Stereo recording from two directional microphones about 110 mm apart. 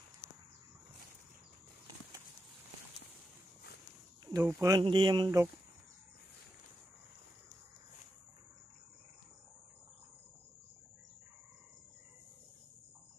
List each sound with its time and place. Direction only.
4.3 s speech: 30° right (ahead or behind)
4.8 s speech: 50° right (ahead or behind)